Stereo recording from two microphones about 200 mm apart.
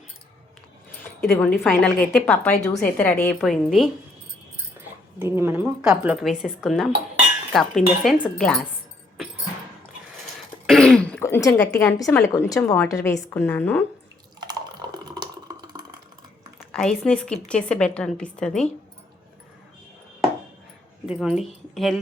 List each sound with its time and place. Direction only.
1.6 s a woman's voice: 5° left (ahead or behind)
5.2 s speech: 10° right (ahead or behind); by 8.6 s 5° left (ahead or behind)
10.3 s throat clearing: 5° left (ahead or behind)
11.7 s a woman's voice: 10° left (ahead or behind)
14.4 s water: 20° right (ahead or behind)
16.6 s speech: centre (ahead or behind)
21.1 s speech: centre (ahead or behind)